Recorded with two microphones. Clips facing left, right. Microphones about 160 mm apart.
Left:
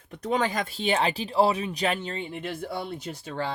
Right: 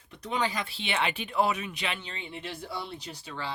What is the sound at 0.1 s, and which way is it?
Speech, 45° left (ahead or behind).